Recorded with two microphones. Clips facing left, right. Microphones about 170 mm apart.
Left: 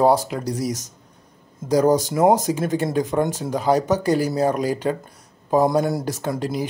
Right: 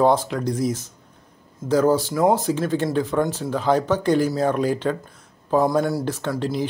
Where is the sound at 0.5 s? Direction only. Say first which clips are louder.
Right 3 dB; 10° left (ahead or behind).